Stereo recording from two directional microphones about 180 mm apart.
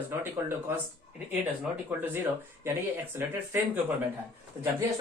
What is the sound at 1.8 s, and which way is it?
Speech, 10° right (ahead or behind).